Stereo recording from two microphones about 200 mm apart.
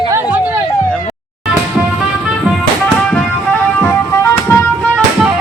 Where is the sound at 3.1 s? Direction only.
5° left (ahead or behind).